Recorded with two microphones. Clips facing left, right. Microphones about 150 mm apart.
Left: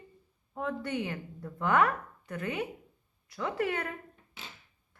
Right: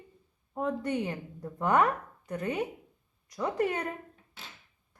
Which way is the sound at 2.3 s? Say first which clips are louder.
Right 3 dB; 40° right (ahead or behind).